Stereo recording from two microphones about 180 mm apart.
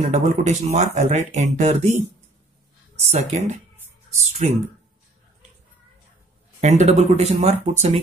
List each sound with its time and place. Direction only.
0.0 s speech: 40° right (ahead or behind)
3.1 s speech: 40° right (ahead or behind)
6.6 s speech: 40° right (ahead or behind)